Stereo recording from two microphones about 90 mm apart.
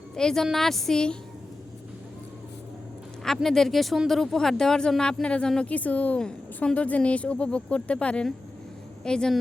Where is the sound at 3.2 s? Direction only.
5° left (ahead or behind).